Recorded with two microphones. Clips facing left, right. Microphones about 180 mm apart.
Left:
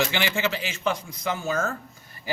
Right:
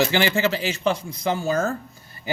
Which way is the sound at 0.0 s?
40° right (ahead or behind).